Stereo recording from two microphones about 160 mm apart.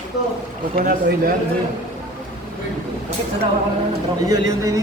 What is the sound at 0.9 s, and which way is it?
Speech, 60° right (ahead or behind).